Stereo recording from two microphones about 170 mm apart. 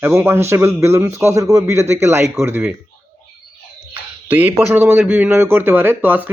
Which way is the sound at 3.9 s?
10° right (ahead or behind).